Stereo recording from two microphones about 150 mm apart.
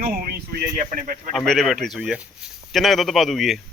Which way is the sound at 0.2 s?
90° right.